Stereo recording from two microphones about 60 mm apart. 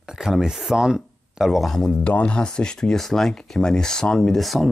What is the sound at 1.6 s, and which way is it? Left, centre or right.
Speech, centre.